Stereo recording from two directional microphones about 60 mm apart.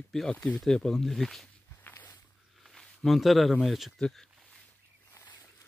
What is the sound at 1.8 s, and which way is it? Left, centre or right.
Walk, left.